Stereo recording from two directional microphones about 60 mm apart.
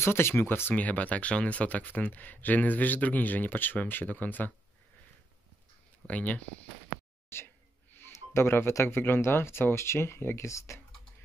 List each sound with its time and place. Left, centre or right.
0.0 s speech: left
6.0 s speech: left
7.2 s speech: left